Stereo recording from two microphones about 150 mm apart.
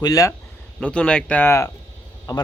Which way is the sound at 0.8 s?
5° left (ahead or behind).